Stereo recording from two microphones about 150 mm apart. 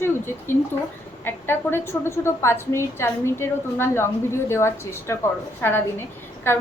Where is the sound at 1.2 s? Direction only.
15° left (ahead or behind).